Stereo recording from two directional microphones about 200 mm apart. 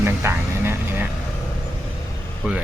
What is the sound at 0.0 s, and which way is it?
Music, 10° right (ahead or behind).